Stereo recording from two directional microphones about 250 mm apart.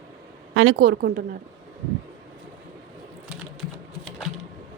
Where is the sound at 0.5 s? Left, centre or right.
Right.